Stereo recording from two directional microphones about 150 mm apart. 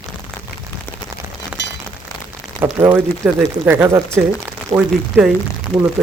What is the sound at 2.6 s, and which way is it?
Speech, 10° right (ahead or behind).